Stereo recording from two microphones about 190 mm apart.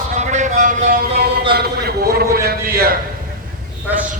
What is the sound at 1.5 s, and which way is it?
A man's voice, 55° right (ahead or behind).